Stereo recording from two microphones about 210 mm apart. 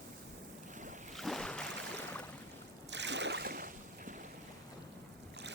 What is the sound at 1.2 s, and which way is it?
Boat, centre (ahead or behind).